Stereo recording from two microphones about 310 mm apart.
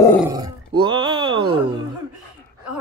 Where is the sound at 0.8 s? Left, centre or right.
Centre.